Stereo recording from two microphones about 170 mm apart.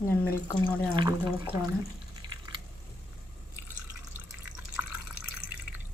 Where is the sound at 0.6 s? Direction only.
25° right (ahead or behind).